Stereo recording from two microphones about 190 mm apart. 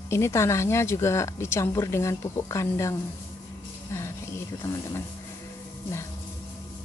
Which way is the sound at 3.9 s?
15° left (ahead or behind).